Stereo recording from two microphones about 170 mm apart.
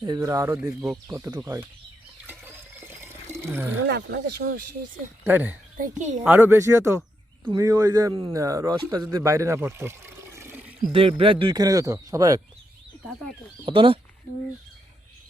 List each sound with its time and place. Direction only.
0.0 s speech: 20° right (ahead or behind)
2.2 s water: 10° right (ahead or behind)
3.8 s speech: 75° right (ahead or behind)
5.2 s speech: 10° right (ahead or behind)
5.7 s a woman's voice: 50° right (ahead or behind)
6.2 s a man's voice: 10° right (ahead or behind)
10.9 s a man's voice: 30° right (ahead or behind)
13.7 s speech: 30° right (ahead or behind)